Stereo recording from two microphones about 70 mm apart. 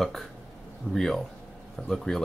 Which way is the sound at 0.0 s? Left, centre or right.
Centre.